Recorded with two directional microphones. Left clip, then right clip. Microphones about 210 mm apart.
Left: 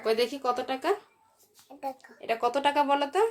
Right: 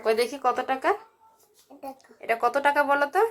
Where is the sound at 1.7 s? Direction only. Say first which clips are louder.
Left 1 dB; 30° left (ahead or behind).